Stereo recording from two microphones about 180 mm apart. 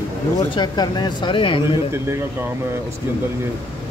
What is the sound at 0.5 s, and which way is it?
Speech, 25° left (ahead or behind).